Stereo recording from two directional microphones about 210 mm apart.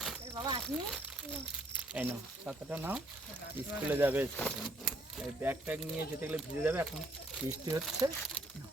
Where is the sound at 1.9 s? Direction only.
10° right (ahead or behind).